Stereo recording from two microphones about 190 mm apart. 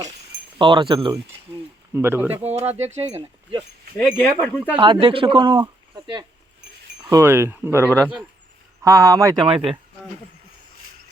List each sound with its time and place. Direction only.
0.6 s speech: 25° right (ahead or behind)
1.9 s speech: 10° right (ahead or behind)
2.3 s speech: 35° right (ahead or behind)
3.6 s speech: centre (ahead or behind)
4.8 s speech: 25° right (ahead or behind)